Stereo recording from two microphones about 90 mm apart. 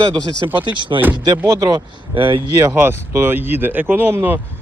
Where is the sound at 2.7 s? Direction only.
25° right (ahead or behind).